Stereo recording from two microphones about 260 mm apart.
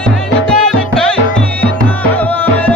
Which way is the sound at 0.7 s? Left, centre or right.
Centre.